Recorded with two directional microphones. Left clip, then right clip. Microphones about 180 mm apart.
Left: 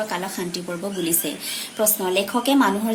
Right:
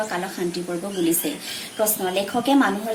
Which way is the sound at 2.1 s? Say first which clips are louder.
Even; 35° left (ahead or behind).